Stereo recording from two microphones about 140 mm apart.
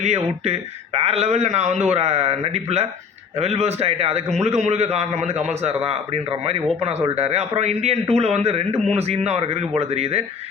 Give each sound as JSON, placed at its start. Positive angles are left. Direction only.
{"t": 0.0, "sound": "a man's voice", "side_deg": -50}